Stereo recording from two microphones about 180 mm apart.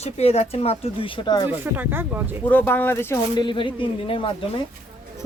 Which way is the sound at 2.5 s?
10° left (ahead or behind).